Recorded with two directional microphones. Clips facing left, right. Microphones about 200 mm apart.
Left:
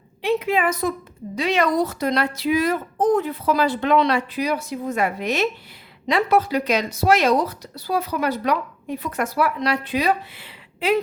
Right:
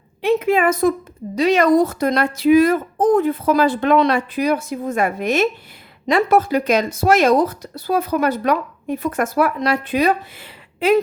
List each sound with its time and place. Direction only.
0.2 s speech: 45° right (ahead or behind)